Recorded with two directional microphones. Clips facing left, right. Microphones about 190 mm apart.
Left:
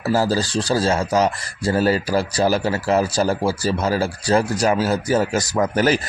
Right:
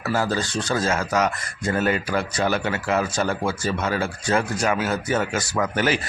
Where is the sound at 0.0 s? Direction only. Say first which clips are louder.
Left 4 dB; 35° left (ahead or behind).